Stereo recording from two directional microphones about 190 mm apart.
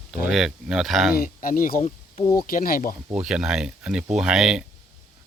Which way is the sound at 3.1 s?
5° right (ahead or behind).